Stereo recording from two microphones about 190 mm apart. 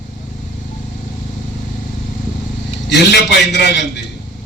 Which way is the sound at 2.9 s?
65° left (ahead or behind).